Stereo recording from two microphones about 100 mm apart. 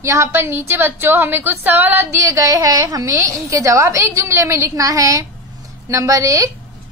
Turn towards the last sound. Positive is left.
turn(degrees=-30)  # may be behind; listen again after turning